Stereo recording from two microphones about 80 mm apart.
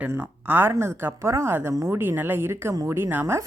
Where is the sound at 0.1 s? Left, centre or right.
Right.